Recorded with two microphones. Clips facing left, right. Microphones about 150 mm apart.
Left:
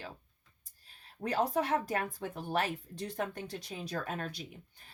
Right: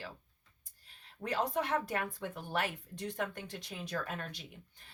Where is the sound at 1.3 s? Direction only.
40° left (ahead or behind).